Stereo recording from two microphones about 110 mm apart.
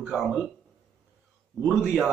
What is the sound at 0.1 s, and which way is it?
Speech, 5° right (ahead or behind).